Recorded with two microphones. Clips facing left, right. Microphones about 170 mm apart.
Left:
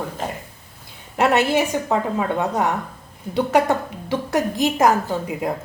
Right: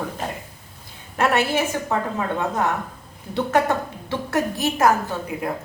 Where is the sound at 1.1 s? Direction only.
15° left (ahead or behind).